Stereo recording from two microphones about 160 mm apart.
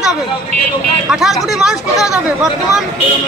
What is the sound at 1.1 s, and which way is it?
Speech, centre (ahead or behind).